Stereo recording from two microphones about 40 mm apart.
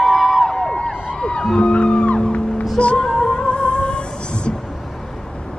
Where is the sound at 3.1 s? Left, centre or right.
Centre.